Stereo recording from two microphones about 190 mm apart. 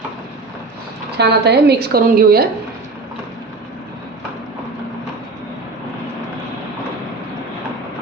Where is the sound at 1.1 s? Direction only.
60° right (ahead or behind).